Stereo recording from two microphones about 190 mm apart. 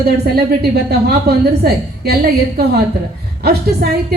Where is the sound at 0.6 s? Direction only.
55° right (ahead or behind).